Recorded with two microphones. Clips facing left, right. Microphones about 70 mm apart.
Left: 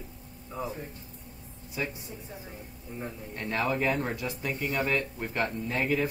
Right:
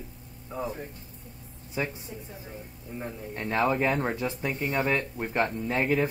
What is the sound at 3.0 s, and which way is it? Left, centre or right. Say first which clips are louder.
Speech: right 2 dB; right.